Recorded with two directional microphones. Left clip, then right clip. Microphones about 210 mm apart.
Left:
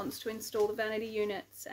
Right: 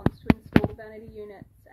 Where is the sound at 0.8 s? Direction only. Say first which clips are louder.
Left 8 dB; 20° left (ahead or behind).